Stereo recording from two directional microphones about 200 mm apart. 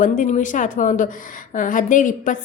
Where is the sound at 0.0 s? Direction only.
40° left (ahead or behind).